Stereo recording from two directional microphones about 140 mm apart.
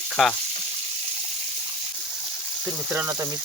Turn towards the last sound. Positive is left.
turn(degrees=-15)  # may be behind; listen again after turning